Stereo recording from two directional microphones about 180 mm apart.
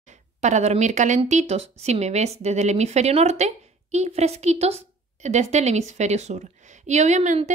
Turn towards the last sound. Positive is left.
turn(degrees=-40)  # may be behind; listen again after turning